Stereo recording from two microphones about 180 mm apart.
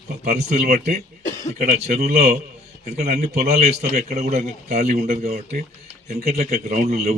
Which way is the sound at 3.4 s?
35° right (ahead or behind).